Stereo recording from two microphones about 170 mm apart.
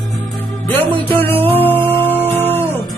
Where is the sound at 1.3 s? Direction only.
35° right (ahead or behind).